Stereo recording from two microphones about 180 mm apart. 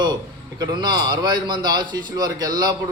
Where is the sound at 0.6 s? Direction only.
25° right (ahead or behind).